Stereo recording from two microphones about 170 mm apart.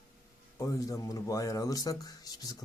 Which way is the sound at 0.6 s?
20° left (ahead or behind).